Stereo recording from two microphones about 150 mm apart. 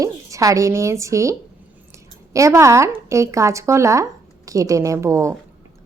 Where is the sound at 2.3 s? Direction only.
20° right (ahead or behind).